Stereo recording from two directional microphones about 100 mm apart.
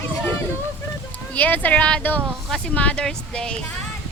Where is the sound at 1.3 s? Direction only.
15° left (ahead or behind).